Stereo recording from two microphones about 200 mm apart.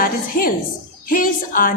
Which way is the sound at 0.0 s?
45° left (ahead or behind).